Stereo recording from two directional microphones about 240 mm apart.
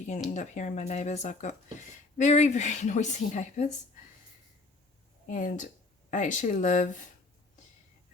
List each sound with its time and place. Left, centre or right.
0.3 s speech: left
5.2 s speech: left